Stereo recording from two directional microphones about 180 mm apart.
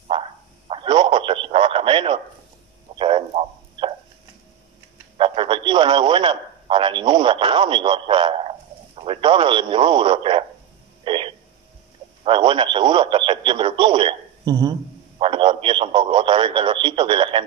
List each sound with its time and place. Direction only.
0.7 s a sound: 30° right (ahead or behind)
5.1 s speech: 30° right (ahead or behind)
11.1 s radio: 30° right (ahead or behind)
12.3 s speech: 30° right (ahead or behind)